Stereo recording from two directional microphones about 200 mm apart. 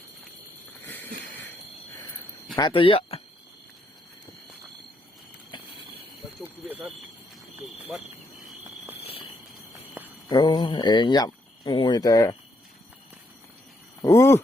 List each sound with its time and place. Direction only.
0.8 s a sound: 10° left (ahead or behind)
2.6 s speech: 25° left (ahead or behind)
6.4 s speech: 10° right (ahead or behind)
9.0 s a sound: 30° left (ahead or behind)
10.2 s speech: 20° left (ahead or behind)
14.0 s speech: 15° left (ahead or behind)